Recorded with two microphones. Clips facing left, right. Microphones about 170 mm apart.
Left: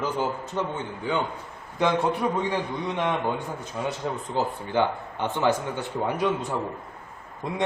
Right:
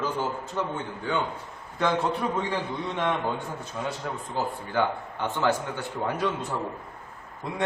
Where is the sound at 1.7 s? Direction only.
15° left (ahead or behind).